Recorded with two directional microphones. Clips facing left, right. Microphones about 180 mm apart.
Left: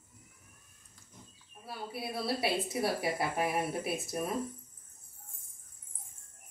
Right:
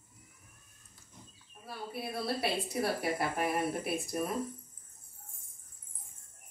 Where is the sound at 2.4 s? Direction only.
5° left (ahead or behind).